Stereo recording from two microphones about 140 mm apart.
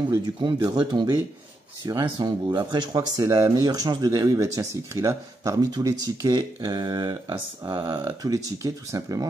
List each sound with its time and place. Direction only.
0.7 s speech: 30° right (ahead or behind)